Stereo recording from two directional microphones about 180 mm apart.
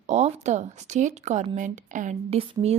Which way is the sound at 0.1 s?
40° right (ahead or behind).